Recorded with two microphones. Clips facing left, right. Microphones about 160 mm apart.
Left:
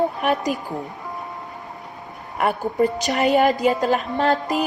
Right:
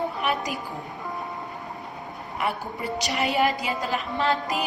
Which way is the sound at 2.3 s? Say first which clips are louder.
Left 9 dB; 50° left (ahead or behind).